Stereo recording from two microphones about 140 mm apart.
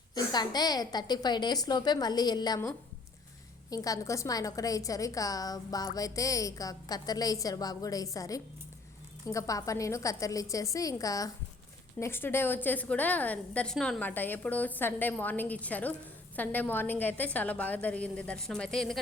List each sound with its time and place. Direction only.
0.1 s a woman's voice: 30° left (ahead or behind)
3.7 s a woman's voice: 25° left (ahead or behind); by 18.9 s 5° left (ahead or behind)